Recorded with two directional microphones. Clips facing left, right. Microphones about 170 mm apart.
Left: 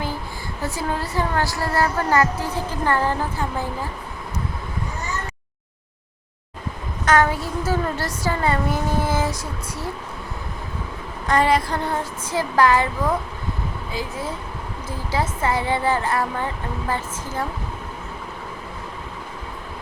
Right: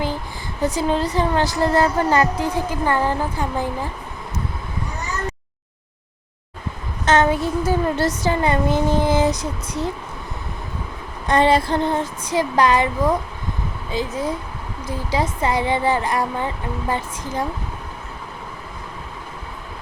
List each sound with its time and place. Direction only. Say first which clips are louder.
0.6 s a woman's voice: right 6 dB; 20° right (ahead or behind)
7.0 s a woman's voice: right 2 dB; 25° right (ahead or behind)
11.3 s a woman's voice: right 3 dB; 25° right (ahead or behind)